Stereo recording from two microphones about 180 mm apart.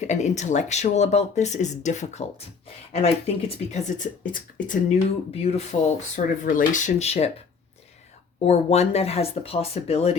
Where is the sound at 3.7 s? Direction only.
40° left (ahead or behind).